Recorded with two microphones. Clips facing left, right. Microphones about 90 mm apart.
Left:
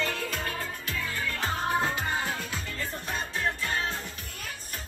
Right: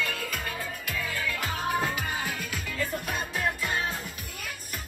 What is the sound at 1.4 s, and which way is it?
Music, 35° left (ahead or behind).